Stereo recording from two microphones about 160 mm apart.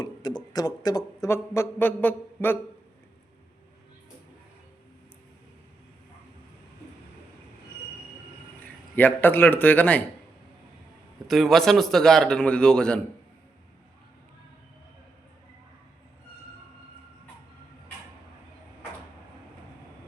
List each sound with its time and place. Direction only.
0.0 s speech: 25° left (ahead or behind)
9.0 s speech: 10° left (ahead or behind)
11.3 s a man's voice: centre (ahead or behind)